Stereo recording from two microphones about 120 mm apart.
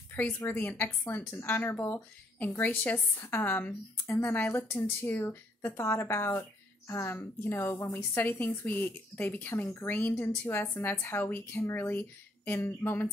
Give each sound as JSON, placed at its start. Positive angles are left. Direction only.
{"t": 0.1, "sound": "a woman's voice", "side_deg": 15}